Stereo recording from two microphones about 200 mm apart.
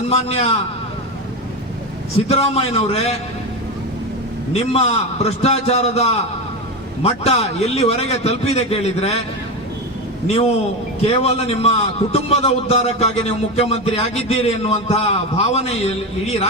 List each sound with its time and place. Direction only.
0.1 s a man's voice: 30° left (ahead or behind)
2.2 s a man's voice: 30° left (ahead or behind)
4.5 s a man's voice: 30° left (ahead or behind)
10.2 s a man's voice: 35° left (ahead or behind)